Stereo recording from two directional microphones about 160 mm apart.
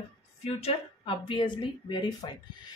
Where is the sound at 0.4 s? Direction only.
40° left (ahead or behind).